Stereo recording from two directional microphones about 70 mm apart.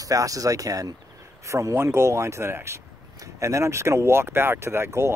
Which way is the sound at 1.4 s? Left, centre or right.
Right.